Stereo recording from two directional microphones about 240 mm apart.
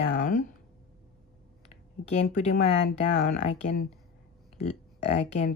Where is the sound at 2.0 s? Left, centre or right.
Left.